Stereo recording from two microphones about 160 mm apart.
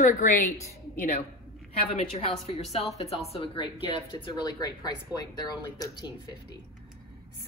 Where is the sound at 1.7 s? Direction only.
40° left (ahead or behind).